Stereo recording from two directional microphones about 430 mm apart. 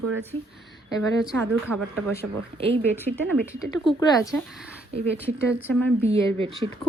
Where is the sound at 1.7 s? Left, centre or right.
Right.